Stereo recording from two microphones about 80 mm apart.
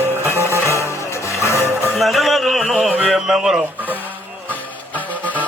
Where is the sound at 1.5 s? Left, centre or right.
Right.